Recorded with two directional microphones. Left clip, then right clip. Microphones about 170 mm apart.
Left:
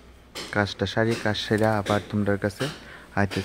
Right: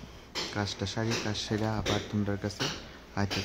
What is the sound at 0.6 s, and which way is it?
Speech, 15° left (ahead or behind).